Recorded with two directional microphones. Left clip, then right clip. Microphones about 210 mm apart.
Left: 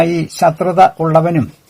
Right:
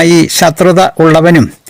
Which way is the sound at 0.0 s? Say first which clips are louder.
Right 6 dB; 50° right (ahead or behind).